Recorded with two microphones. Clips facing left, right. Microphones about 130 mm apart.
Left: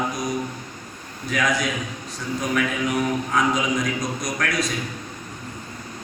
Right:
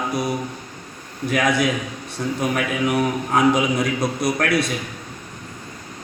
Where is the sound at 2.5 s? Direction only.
50° right (ahead or behind).